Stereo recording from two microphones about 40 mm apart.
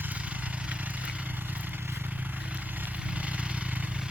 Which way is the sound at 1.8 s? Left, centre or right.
Right.